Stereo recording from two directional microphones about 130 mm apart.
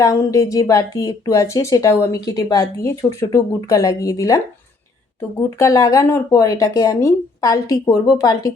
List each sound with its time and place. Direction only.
0.0 s speech: 25° left (ahead or behind)
5.4 s speech: 20° left (ahead or behind)